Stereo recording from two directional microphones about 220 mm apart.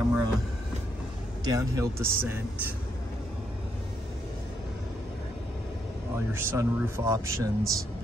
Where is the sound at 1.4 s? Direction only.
15° right (ahead or behind).